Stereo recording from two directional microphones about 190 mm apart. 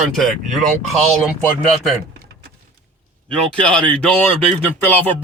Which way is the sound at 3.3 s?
5° left (ahead or behind).